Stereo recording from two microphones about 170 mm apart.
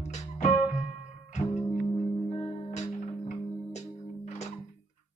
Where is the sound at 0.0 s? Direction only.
40° left (ahead or behind).